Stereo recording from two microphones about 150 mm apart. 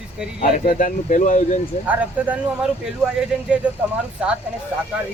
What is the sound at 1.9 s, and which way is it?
Speech, 10° right (ahead or behind).